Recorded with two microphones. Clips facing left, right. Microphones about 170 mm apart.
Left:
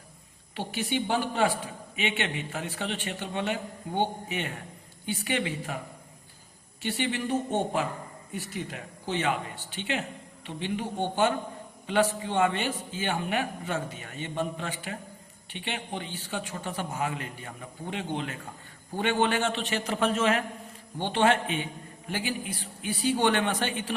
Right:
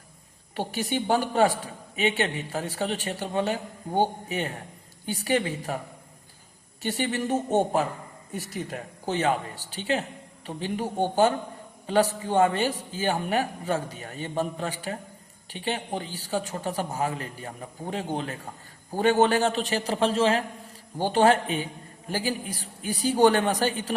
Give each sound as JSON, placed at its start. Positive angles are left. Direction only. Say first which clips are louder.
{"t": 0.5, "sound": "a woman's voice", "louder": "right 2 dB", "side_deg": -40}
{"t": 6.8, "sound": "a woman's voice", "louder": "right 2 dB", "side_deg": -40}